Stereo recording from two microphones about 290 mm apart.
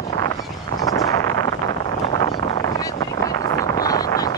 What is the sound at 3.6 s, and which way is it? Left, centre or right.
Wind noise, centre.